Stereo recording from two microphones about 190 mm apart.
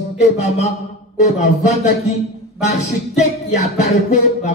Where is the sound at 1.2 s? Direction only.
40° left (ahead or behind).